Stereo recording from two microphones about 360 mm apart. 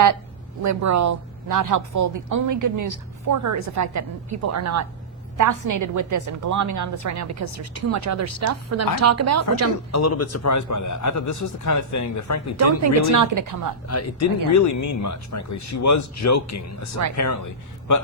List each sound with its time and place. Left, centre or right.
0.6 s a woman's voice: right
9.9 s a man's voice: left
12.5 s a woman's voice: right
13.8 s a man's voice: left